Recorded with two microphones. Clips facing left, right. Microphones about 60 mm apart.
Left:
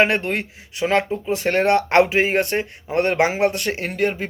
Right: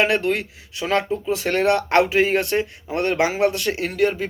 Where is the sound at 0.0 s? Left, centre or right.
Left.